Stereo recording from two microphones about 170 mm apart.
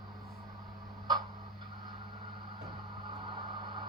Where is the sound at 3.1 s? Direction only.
25° right (ahead or behind).